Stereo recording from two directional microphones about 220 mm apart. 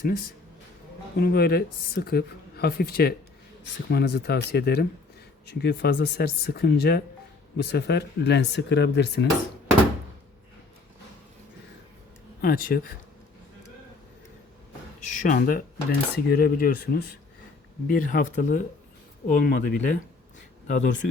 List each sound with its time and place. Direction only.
1.2 s speech: 45° left (ahead or behind)
12.4 s speech: 40° left (ahead or behind)
15.0 s speech: 35° left (ahead or behind)